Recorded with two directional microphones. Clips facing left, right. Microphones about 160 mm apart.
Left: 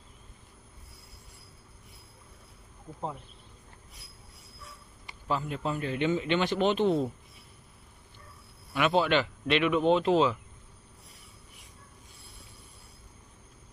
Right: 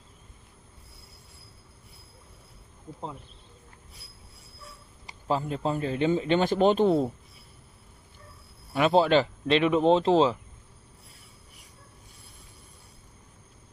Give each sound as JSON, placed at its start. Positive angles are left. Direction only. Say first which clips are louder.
{"t": 5.3, "sound": "a man's voice", "louder": "right 4 dB", "side_deg": -35}
{"t": 8.7, "sound": "a man's voice", "louder": "right 4 dB", "side_deg": -35}